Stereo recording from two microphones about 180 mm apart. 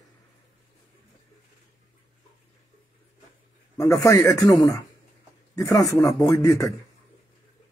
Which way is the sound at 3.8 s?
15° left (ahead or behind).